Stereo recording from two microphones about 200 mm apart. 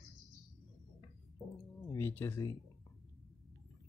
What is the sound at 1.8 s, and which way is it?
Speech, 10° left (ahead or behind).